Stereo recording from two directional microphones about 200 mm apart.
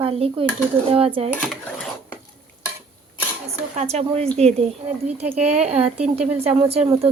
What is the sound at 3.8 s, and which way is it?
A woman's voice, 30° right (ahead or behind).